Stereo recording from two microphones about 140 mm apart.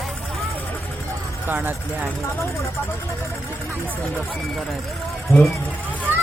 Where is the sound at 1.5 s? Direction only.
15° right (ahead or behind).